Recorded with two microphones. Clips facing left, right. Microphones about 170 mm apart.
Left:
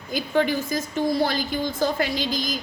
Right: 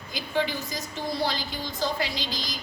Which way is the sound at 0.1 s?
50° left (ahead or behind).